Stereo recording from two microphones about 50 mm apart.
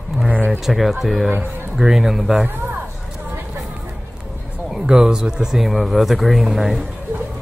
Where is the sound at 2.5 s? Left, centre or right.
Right.